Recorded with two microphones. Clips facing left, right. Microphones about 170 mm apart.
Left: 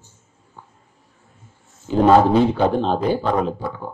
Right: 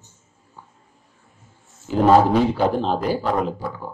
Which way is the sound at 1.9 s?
5° right (ahead or behind).